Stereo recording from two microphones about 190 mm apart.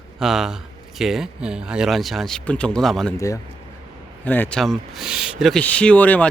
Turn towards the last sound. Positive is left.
turn(degrees=10)  # may be behind; listen again after turning